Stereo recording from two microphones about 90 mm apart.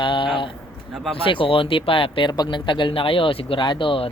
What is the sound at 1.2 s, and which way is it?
Speech, 80° left.